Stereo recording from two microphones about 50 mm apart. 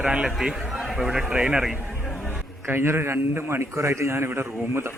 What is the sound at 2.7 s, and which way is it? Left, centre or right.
A man's voice, right.